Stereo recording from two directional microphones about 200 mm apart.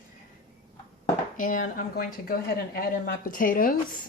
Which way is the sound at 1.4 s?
40° left (ahead or behind).